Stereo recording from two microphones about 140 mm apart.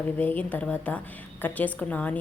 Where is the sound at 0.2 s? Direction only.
10° left (ahead or behind).